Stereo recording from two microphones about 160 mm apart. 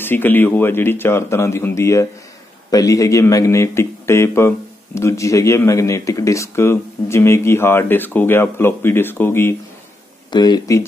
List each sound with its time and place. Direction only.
0.0 s speech: 10° left (ahead or behind)
10.3 s speech: 25° left (ahead or behind)